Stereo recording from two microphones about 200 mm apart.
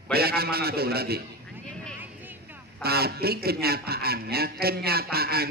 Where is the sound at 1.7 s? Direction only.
5° left (ahead or behind).